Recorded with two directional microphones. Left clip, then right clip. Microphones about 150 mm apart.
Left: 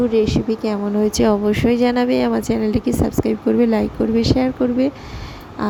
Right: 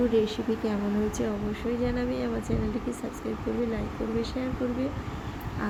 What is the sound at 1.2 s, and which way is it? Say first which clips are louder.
A woman's voice: left 15 dB; 85° left.